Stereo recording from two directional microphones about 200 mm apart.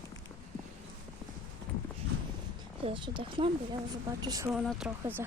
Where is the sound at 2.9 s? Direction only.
25° right (ahead or behind).